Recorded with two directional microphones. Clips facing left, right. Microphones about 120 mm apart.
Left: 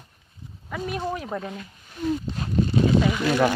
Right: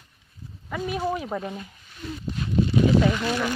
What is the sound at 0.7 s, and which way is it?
Speech, centre (ahead or behind).